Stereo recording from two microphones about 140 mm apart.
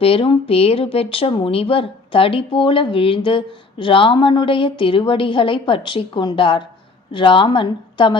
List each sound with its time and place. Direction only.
0.0 s speech: 40° left (ahead or behind)